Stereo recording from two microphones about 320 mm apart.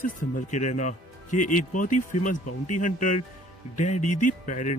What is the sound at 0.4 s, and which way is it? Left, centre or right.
Speech, left.